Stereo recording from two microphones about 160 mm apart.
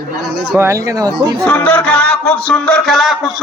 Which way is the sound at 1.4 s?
5° left (ahead or behind).